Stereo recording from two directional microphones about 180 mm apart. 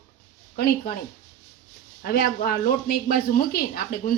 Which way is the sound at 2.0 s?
60° left (ahead or behind).